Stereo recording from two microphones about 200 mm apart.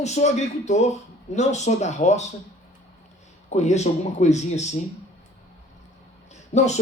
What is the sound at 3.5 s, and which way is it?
Speech, 35° left (ahead or behind).